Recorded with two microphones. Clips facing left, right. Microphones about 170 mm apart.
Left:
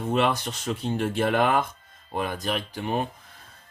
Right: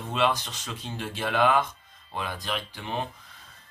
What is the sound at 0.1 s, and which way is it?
Speech, 55° left (ahead or behind).